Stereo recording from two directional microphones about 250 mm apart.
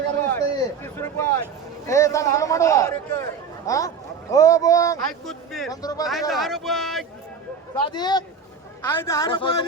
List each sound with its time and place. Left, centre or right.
0.2 s speech: centre
5.2 s speech: centre
5.7 s speech: centre
6.1 s speech: centre
7.9 s speech: centre